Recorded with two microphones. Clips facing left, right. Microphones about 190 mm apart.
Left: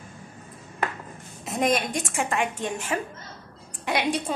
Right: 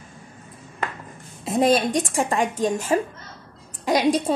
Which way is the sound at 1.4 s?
30° right (ahead or behind).